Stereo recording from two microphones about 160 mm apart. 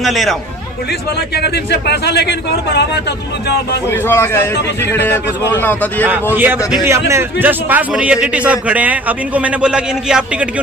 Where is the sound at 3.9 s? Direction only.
15° left (ahead or behind).